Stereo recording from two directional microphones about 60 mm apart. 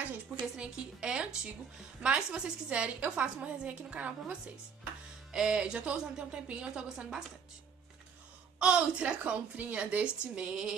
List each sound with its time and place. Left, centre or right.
0.6 s a woman's voice: centre
7.0 s speech: centre
8.5 s a woman's voice: centre